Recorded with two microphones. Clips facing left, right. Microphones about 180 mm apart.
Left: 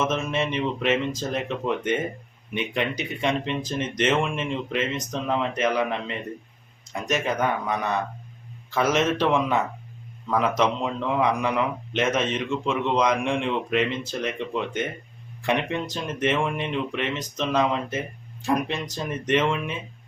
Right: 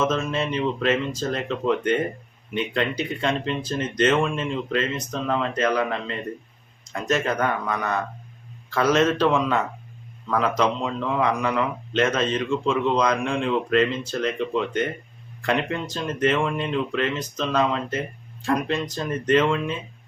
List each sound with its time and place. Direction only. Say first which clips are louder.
0.0 s a man's voice: right 1 dB; 15° left (ahead or behind)